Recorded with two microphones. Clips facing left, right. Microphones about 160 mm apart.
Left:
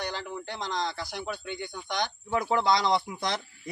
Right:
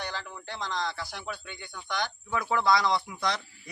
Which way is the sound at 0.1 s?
20° left (ahead or behind).